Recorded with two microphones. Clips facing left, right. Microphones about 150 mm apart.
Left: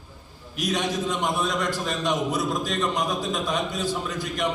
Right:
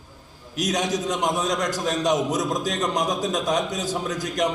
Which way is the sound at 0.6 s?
45° right (ahead or behind).